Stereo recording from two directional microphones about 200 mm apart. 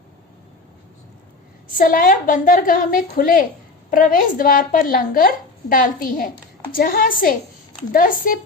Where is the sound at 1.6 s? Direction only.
45° left (ahead or behind).